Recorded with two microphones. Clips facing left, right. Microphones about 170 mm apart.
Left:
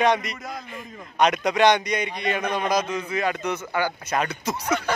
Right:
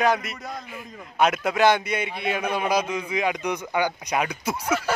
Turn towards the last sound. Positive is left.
turn(degrees=-10)  # may be behind; listen again after turning